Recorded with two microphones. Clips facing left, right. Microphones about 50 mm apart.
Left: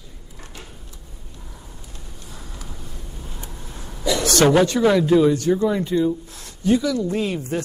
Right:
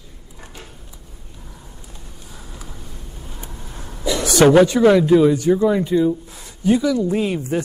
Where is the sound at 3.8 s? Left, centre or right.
Centre.